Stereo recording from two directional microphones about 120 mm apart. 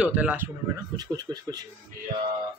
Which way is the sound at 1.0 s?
35° right (ahead or behind).